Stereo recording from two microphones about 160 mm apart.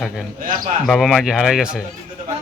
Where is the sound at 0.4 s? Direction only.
55° right (ahead or behind).